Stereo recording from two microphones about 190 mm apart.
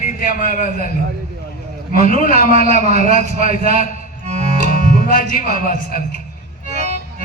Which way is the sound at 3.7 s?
35° right (ahead or behind).